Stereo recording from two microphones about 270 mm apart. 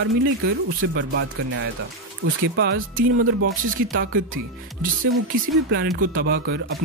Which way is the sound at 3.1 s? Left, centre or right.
Right.